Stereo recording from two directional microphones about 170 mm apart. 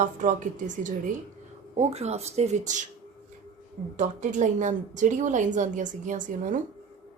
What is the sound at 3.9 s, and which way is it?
Speech, 45° right (ahead or behind).